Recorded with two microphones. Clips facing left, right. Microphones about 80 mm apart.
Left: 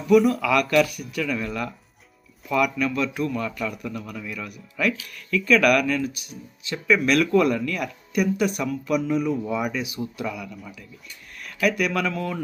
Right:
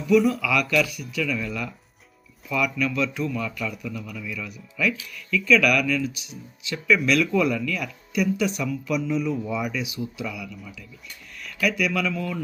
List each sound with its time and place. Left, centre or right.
0.3 s a man's voice: left
11.6 s speech: left